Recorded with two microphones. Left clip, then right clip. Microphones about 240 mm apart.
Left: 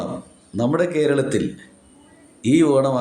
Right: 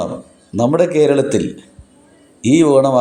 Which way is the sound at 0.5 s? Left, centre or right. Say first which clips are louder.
Right 6 dB; centre.